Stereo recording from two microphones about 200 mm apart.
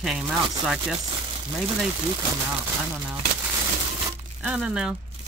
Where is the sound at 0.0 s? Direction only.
Centre (ahead or behind).